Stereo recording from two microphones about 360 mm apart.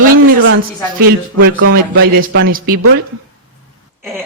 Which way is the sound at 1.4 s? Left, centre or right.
Right.